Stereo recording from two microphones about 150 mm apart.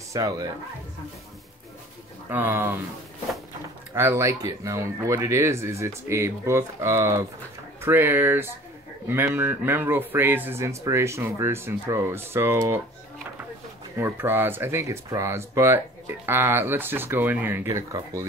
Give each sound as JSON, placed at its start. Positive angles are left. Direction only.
{"t": 0.1, "sound": "speech", "side_deg": -25}
{"t": 2.2, "sound": "speech", "side_deg": -15}
{"t": 3.9, "sound": "speech", "side_deg": -20}
{"t": 13.9, "sound": "speech", "side_deg": -15}